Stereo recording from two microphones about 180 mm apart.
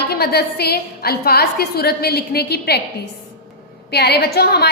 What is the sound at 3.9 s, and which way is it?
Speech, 65° left (ahead or behind).